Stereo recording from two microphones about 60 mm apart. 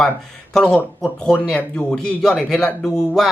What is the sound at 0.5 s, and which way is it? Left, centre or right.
A man's voice, centre.